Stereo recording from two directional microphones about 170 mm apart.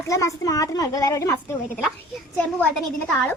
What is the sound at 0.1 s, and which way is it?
A woman's voice, 20° left (ahead or behind).